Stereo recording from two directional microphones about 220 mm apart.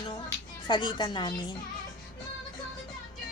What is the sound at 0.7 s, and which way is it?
Speech, 20° left (ahead or behind).